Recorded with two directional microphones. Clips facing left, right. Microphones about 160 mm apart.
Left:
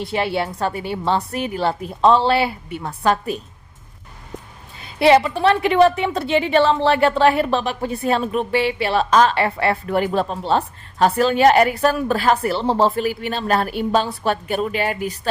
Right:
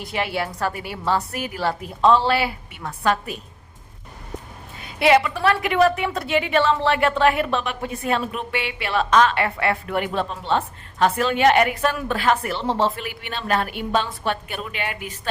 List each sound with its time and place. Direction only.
0.0 s a woman's voice: 30° left (ahead or behind)
4.9 s a woman's voice: 30° left (ahead or behind)